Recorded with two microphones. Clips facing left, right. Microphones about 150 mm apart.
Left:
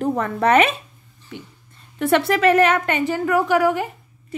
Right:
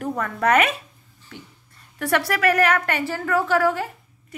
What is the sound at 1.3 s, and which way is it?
A woman's voice, 15° left (ahead or behind).